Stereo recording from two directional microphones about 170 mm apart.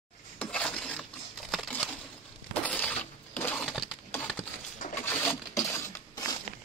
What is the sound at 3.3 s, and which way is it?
Breaking, 10° left (ahead or behind).